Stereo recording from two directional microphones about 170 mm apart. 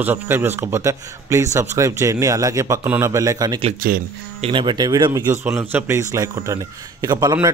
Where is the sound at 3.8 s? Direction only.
55° right (ahead or behind).